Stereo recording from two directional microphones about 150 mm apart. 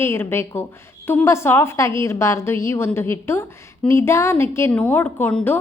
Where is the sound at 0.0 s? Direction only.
15° left (ahead or behind).